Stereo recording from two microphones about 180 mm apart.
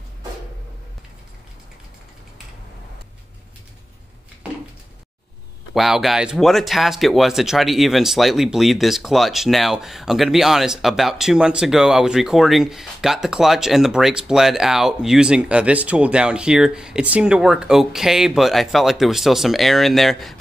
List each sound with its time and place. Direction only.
5.8 s speech: centre (ahead or behind)